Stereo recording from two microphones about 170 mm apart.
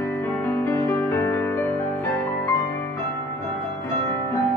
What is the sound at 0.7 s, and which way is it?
Music, 15° left (ahead or behind).